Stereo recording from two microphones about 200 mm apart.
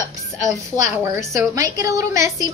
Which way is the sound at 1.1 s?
15° right (ahead or behind).